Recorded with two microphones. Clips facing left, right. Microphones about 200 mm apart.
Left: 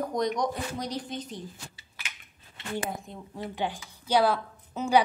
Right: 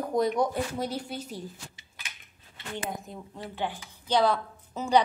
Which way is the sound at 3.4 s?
15° left (ahead or behind).